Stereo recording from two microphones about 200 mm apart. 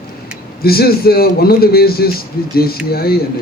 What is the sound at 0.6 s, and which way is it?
Speech, 50° left (ahead or behind).